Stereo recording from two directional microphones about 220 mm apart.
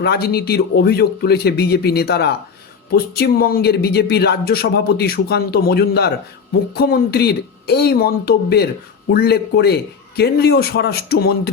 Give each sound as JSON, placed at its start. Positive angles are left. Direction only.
{"t": 0.0, "sound": "a man's voice", "side_deg": 45}